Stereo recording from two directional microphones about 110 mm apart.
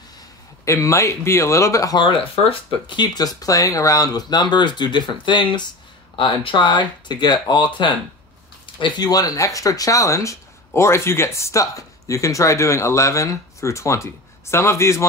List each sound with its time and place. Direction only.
0.7 s speech: 30° left (ahead or behind)
2.7 s speech: 45° left (ahead or behind); by 15.0 s 25° left (ahead or behind)